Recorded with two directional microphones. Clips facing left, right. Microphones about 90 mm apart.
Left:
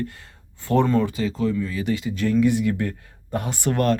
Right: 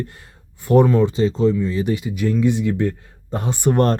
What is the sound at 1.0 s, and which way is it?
Speech, 25° right (ahead or behind).